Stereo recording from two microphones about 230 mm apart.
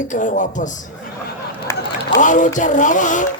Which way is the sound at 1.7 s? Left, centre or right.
Centre.